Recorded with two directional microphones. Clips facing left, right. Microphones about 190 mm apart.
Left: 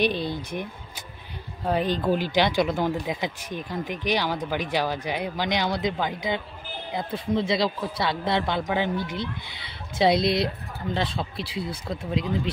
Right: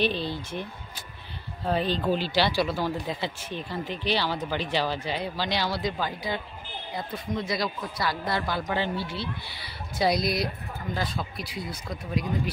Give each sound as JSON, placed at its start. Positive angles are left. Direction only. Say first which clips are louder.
{"t": 0.0, "sound": "speech", "louder": "left 2 dB", "side_deg": 15}